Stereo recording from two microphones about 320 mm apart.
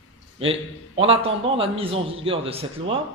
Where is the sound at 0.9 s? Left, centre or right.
Centre.